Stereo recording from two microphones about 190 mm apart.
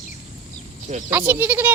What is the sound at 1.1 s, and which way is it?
Speech, 10° right (ahead or behind).